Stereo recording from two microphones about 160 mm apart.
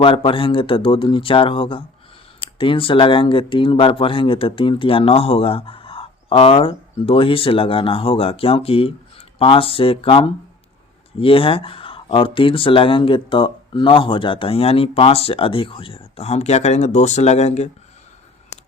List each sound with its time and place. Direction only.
0.0 s speech: 35° left (ahead or behind)